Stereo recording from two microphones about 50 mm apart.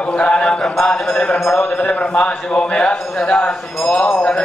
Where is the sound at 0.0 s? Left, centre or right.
Left.